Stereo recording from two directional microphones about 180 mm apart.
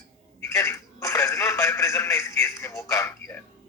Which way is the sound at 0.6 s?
15° left (ahead or behind).